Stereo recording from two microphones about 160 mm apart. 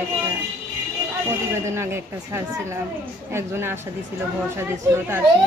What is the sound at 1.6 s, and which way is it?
A child's voice, 15° right (ahead or behind).